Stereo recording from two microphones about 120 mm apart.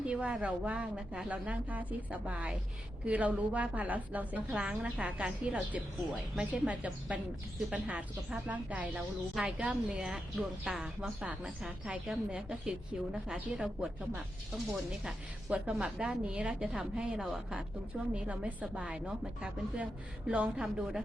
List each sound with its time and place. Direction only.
0.0 s a woman's voice: 10° right (ahead or behind)
15.0 s a woman's voice: 10° right (ahead or behind)